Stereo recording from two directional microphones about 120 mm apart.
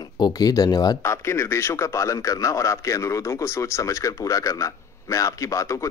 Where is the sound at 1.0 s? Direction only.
20° left (ahead or behind).